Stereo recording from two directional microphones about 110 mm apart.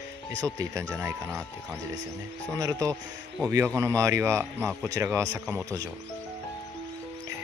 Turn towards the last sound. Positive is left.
turn(degrees=-35)  # may be behind; listen again after turning